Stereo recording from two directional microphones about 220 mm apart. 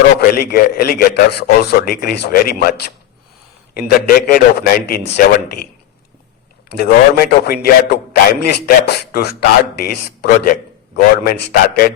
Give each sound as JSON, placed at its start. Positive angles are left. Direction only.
{"t": 0.2, "sound": "speech", "side_deg": 45}
{"t": 3.8, "sound": "speech", "side_deg": 45}
{"t": 6.7, "sound": "speech", "side_deg": 45}